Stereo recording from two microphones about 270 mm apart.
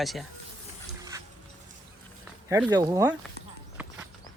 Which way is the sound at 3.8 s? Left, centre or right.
Centre.